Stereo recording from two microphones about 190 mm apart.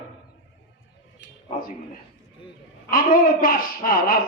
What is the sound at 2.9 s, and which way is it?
A man's voice, 45° left (ahead or behind).